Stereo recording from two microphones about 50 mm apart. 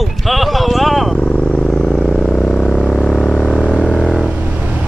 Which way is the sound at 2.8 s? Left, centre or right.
Centre.